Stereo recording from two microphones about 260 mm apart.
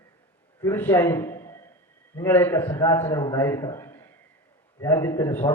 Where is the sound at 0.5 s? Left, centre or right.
Centre.